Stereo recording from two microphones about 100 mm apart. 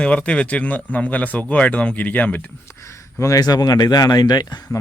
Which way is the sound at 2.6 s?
30° left (ahead or behind).